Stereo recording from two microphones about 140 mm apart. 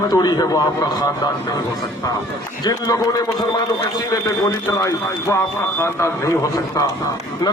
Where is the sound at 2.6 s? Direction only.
25° left (ahead or behind).